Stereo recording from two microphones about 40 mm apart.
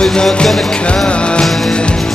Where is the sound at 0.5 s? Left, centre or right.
Centre.